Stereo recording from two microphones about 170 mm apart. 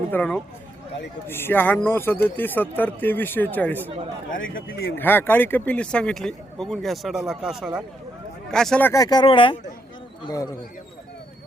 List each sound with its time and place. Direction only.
0.1 s speech: 5° left (ahead or behind)
4.3 s a man's voice: 55° left (ahead or behind)
4.9 s speech: 10° left (ahead or behind)
8.9 s speech: 20° left (ahead or behind)